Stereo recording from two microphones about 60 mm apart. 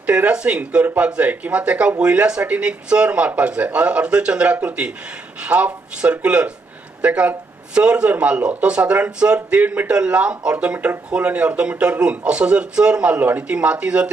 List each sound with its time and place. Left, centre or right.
0.0 s speech: right
9.9 s speech: centre